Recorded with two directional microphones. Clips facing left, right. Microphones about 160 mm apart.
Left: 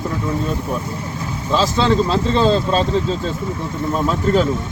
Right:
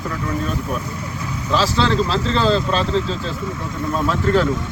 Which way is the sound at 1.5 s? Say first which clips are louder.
Left 2 dB; 20° left (ahead or behind).